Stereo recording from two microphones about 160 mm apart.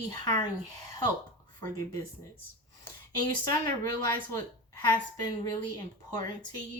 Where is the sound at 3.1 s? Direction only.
25° left (ahead or behind).